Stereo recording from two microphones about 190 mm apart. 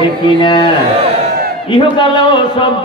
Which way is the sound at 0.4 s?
25° left (ahead or behind).